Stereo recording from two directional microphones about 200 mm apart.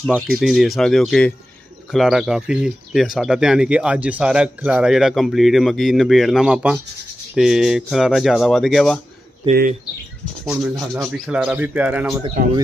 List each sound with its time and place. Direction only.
0.0 s speech: centre (ahead or behind)
9.5 s speech: 40° right (ahead or behind)
10.4 s speech: centre (ahead or behind)